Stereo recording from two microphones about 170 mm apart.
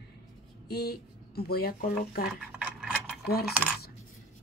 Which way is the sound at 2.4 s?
5° right (ahead or behind).